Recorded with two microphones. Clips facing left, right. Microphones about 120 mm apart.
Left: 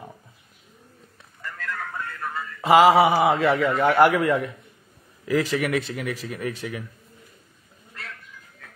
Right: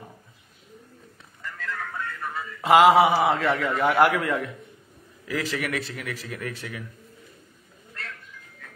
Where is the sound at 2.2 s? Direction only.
Centre (ahead or behind).